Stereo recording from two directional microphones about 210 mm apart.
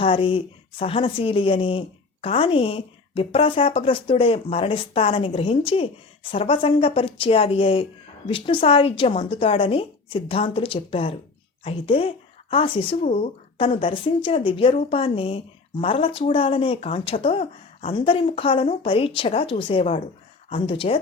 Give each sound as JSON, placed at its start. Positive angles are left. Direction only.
{"t": 0.0, "sound": "speech", "side_deg": 25}